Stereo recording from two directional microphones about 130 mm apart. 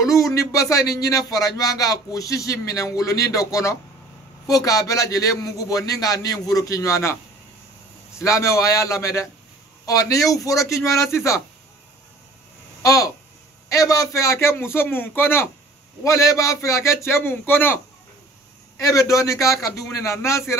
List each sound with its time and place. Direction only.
0.1 s speech: 25° left (ahead or behind)
8.2 s speech: 25° left (ahead or behind)
12.8 s speech: 25° left (ahead or behind)
18.8 s speech: 25° left (ahead or behind)